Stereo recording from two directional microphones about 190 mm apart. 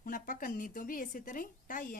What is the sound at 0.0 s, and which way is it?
A woman's voice, 45° left (ahead or behind).